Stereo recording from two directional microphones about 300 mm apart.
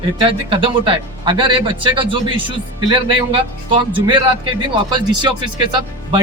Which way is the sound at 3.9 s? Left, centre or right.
Centre.